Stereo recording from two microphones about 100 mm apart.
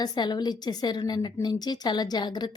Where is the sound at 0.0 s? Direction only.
45° left (ahead or behind).